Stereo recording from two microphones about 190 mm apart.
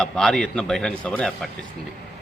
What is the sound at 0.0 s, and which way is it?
A man's voice, 5° left (ahead or behind).